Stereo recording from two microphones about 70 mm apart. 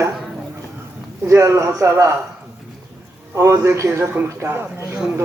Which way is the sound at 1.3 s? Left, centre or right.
Right.